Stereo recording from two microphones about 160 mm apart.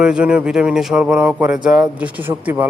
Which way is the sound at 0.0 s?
5° right (ahead or behind).